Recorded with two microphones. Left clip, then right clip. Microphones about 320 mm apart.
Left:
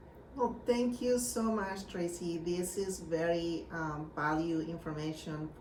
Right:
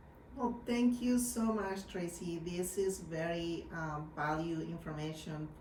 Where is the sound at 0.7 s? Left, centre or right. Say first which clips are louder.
Left 3 dB; centre.